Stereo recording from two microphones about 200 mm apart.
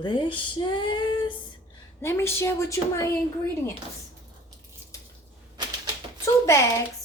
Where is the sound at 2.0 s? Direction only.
15° left (ahead or behind).